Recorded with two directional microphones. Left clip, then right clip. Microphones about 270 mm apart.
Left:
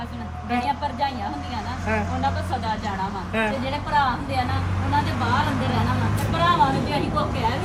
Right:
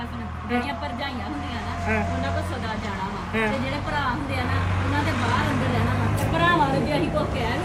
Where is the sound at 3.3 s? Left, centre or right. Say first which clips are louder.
Even; centre.